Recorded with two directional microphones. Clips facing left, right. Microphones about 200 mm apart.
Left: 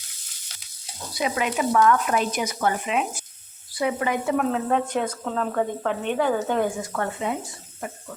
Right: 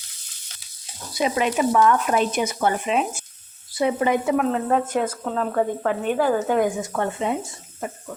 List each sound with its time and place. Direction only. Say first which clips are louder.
1.2 s speech: right 4 dB; 25° right (ahead or behind)
4.4 s speech: right 2 dB; 5° right (ahead or behind)
6.9 s speech: right 3 dB; 20° right (ahead or behind)